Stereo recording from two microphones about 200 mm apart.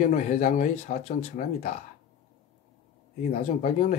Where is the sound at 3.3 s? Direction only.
35° left (ahead or behind).